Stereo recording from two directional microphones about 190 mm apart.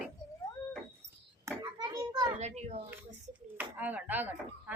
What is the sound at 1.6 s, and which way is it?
Children playing, 20° right (ahead or behind).